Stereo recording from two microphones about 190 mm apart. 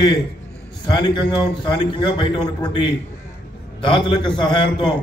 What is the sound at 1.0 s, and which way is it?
A man's voice, 20° left (ahead or behind).